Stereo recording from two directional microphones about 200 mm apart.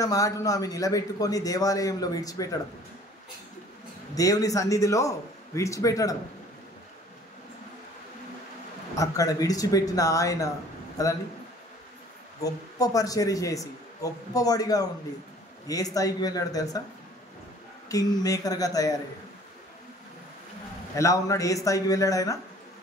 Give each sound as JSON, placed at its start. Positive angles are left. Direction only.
{"t": 0.0, "sound": "a man's voice", "side_deg": 15}
{"t": 4.1, "sound": "a man's voice", "side_deg": 15}
{"t": 8.9, "sound": "a man's voice", "side_deg": 15}
{"t": 12.4, "sound": "a man's voice", "side_deg": 20}
{"t": 17.8, "sound": "a man's voice", "side_deg": 15}
{"t": 20.9, "sound": "a man's voice", "side_deg": 15}